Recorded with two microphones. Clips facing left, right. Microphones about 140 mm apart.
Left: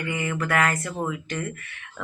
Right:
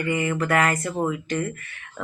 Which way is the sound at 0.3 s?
10° right (ahead or behind).